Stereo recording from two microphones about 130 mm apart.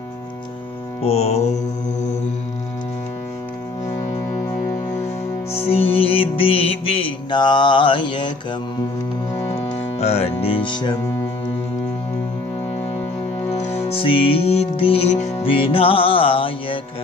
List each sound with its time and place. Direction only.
1.0 s music: 55° left (ahead or behind)
5.0 s music: 50° left (ahead or behind)
9.4 s music: 20° left (ahead or behind)
9.9 s music: 55° left (ahead or behind); by 11.0 s 35° left (ahead or behind)
13.4 s music: 15° left (ahead or behind)
13.7 s music: 55° left (ahead or behind)
15.5 s music: 45° left (ahead or behind)